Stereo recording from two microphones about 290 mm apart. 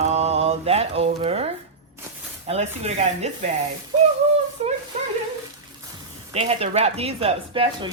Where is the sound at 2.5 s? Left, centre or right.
Right.